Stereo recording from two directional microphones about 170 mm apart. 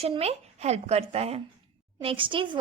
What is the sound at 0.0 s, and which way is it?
A woman's voice, 35° right (ahead or behind).